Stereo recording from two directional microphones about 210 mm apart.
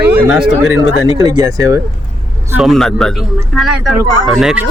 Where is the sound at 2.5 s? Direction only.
Centre (ahead or behind).